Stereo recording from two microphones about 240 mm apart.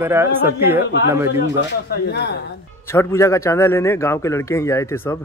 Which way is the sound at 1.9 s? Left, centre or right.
Left.